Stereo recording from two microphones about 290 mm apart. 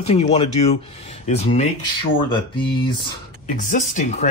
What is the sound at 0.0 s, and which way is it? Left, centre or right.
Speech, left.